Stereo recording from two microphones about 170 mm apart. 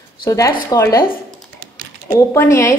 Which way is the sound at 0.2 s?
20° left (ahead or behind).